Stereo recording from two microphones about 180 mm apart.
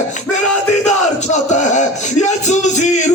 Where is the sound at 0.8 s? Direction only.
40° left (ahead or behind).